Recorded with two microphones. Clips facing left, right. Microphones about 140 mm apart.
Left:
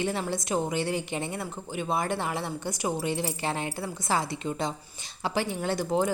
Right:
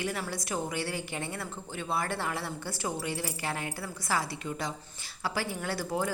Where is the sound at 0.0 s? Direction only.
25° left (ahead or behind).